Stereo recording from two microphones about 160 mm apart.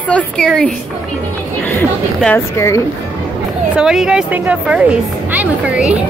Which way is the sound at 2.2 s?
15° left (ahead or behind).